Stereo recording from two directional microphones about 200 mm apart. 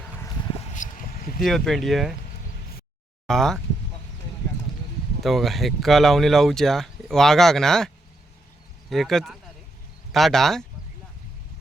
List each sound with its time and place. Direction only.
0.7 s a sound: 40° left (ahead or behind)
1.4 s speech: centre (ahead or behind)
3.2 s speech: centre (ahead or behind)
5.2 s speech: centre (ahead or behind)
8.9 s speech: centre (ahead or behind)